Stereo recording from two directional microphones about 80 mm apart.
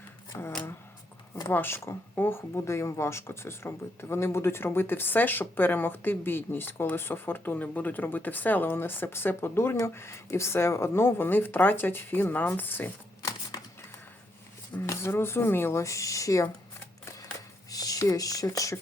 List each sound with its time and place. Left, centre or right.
0.3 s speech: left
1.5 s speech: left
13.5 s a sound: left
14.7 s speech: left
17.7 s a sound: left
18.0 s speech: left